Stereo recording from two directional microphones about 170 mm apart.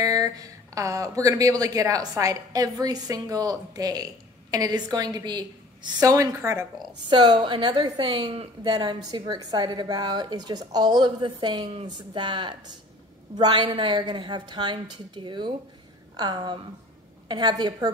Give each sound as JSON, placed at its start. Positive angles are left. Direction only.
{"t": 0.0, "sound": "speech", "side_deg": -20}